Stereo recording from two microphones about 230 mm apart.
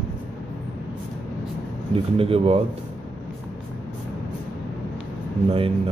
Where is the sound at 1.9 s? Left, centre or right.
Right.